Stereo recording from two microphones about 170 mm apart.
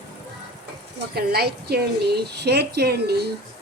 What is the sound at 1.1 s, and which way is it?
A woman's voice, 70° right (ahead or behind).